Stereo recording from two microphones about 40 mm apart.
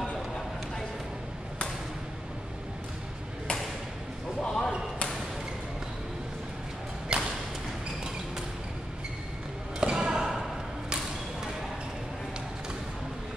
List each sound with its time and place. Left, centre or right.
4.4 s basketball bounce: centre
7.1 s a sound: right
9.8 s basketball bounce: right; by 10.5 s centre